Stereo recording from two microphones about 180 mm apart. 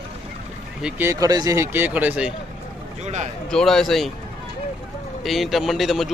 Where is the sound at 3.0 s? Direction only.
40° right (ahead or behind).